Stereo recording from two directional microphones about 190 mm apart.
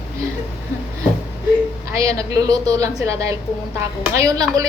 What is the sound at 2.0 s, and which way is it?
A woman's voice, 15° right (ahead or behind).